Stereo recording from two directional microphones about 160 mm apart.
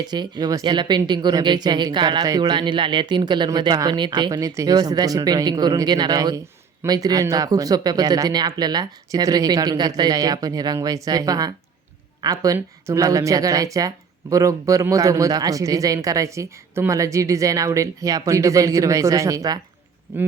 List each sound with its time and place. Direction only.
0.0 s speech: 25° right (ahead or behind)